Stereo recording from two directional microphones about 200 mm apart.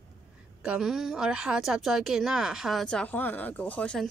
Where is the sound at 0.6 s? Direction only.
5° right (ahead or behind).